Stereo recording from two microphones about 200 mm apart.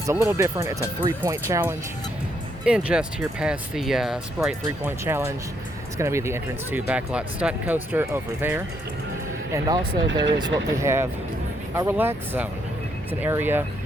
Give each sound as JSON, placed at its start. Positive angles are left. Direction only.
{"t": 0.0, "sound": "speech", "side_deg": -15}
{"t": 2.6, "sound": "speech", "side_deg": -5}